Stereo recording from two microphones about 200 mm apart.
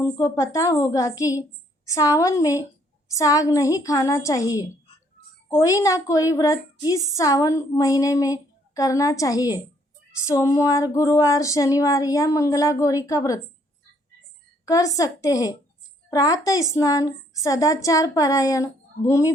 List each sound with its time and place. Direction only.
0.0 s a woman's voice: 15° left (ahead or behind)
14.6 s a woman's voice: 15° left (ahead or behind)